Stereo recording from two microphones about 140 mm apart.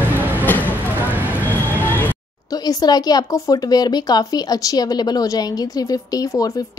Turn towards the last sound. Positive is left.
turn(degrees=30)  # may be behind; listen again after turning